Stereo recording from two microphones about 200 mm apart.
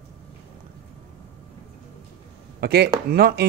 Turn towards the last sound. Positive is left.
turn(degrees=-50)  # may be behind; listen again after turning